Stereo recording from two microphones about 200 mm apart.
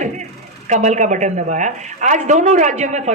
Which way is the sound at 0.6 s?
35° right (ahead or behind).